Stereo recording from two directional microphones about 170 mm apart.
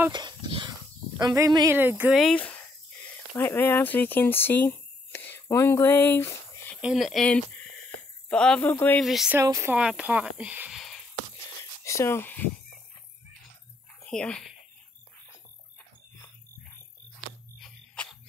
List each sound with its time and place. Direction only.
0.1 s dog: 25° right (ahead or behind)
1.2 s speech: 20° right (ahead or behind)
2.1 s speech: 5° left (ahead or behind)
6.8 s speech: centre (ahead or behind)
9.0 s speech: centre (ahead or behind)
9.4 s speech: 15° right (ahead or behind)
10.8 s a sound: centre (ahead or behind)
11.8 s speech: 15° left (ahead or behind)
14.0 s speech: 5° left (ahead or behind)
17.6 s a sound: 5° left (ahead or behind)